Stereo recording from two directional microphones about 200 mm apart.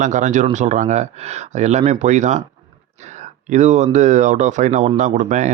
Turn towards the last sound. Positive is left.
turn(degrees=-40)  # may be behind; listen again after turning